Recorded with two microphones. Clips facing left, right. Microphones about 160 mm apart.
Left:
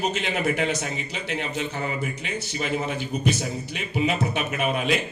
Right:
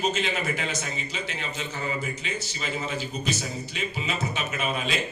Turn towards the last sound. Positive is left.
turn(degrees=60)  # may be behind; listen again after turning